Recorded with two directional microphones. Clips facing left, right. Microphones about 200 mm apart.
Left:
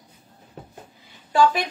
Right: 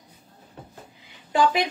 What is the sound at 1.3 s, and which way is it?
Speech, 20° right (ahead or behind).